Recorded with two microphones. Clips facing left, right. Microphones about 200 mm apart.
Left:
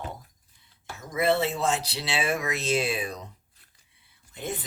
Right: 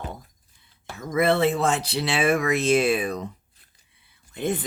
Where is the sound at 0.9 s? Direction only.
55° right (ahead or behind).